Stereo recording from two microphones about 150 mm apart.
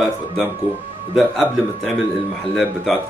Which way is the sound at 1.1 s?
Centre (ahead or behind).